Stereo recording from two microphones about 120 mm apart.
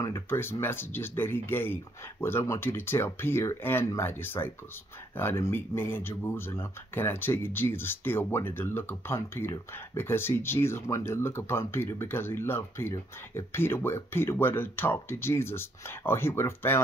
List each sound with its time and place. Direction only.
0.0 s speech: 20° left (ahead or behind)